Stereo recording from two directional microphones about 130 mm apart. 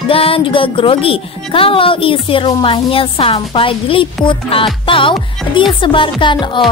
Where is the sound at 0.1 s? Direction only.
45° left (ahead or behind).